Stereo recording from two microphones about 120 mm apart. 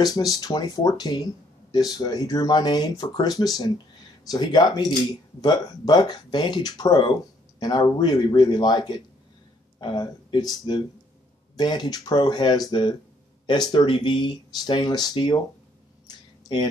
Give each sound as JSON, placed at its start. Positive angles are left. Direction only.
{"t": 0.0, "sound": "speech", "side_deg": 30}
{"t": 11.5, "sound": "speech", "side_deg": 35}